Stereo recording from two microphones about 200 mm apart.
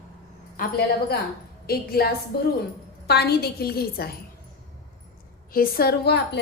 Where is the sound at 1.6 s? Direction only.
50° left (ahead or behind).